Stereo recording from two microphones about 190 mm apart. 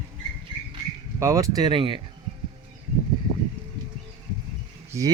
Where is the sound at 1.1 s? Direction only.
15° right (ahead or behind).